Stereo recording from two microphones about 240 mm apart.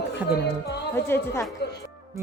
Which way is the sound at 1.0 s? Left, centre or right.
Centre.